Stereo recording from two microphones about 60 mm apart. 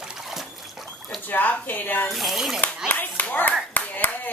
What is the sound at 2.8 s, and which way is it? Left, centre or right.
Clapping, left.